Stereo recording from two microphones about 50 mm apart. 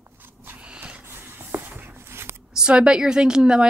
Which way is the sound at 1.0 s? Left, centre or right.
Right.